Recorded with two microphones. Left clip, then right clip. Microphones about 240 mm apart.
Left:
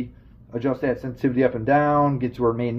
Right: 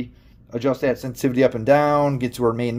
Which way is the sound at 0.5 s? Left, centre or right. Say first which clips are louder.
Right 3 dB; right.